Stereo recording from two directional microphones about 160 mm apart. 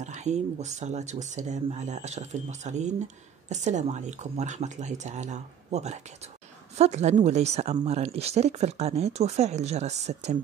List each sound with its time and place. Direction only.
0.0 s speech: 45° right (ahead or behind)